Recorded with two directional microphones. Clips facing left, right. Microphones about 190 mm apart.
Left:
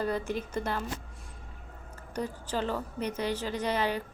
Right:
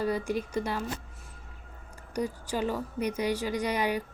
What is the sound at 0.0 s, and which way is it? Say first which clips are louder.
Speech: right 2 dB; 10° right (ahead or behind).